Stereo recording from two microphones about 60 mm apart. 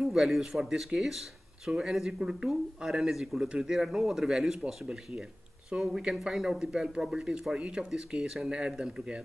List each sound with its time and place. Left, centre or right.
0.0 s speech: centre